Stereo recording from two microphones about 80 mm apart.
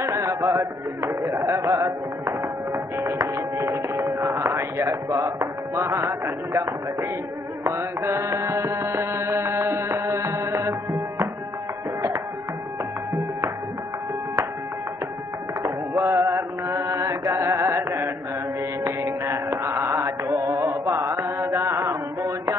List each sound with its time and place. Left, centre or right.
0.1 s a sound: right
1.5 s music: right
15.6 s mantra: right
18.9 s music: right
20.3 s mantra: right